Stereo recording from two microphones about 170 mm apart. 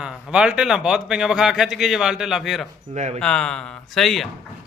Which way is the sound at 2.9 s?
45° right (ahead or behind).